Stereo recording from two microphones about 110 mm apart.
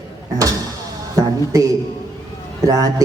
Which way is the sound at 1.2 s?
30° right (ahead or behind).